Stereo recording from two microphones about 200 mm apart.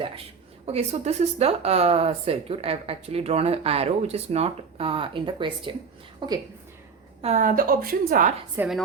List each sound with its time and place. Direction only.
0.6 s a woman's voice: 30° right (ahead or behind)
7.2 s a woman's voice: 35° right (ahead or behind)
8.5 s a woman's voice: 5° right (ahead or behind)